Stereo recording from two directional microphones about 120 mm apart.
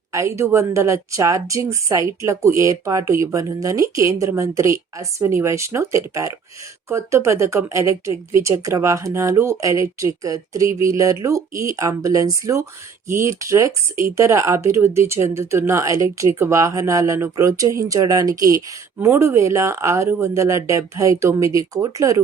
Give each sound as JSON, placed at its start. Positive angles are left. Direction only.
{"t": 0.1, "sound": "a woman's voice", "side_deg": -25}